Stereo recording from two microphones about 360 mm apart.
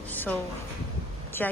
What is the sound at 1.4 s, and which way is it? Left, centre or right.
Speech, centre.